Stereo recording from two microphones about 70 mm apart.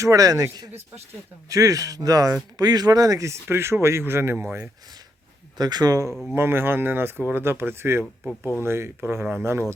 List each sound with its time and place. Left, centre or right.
0.0 s speech: right
1.5 s speech: right
5.5 s speech: right
6.3 s speech: right